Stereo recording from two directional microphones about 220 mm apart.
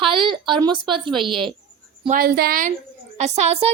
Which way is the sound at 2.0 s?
45° right (ahead or behind).